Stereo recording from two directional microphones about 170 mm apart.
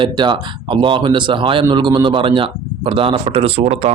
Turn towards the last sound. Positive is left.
turn(degrees=-35)  # may be behind; listen again after turning